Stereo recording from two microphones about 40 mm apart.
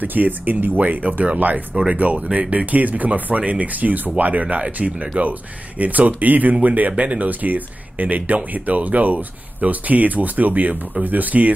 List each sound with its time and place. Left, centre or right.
0.0 s speech: right